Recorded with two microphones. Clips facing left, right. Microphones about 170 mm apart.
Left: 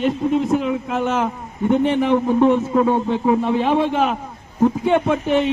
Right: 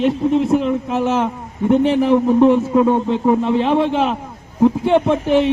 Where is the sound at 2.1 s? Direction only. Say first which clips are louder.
Right 4 dB; centre (ahead or behind).